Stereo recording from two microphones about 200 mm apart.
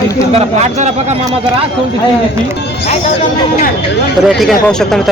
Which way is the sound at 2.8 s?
40° left (ahead or behind).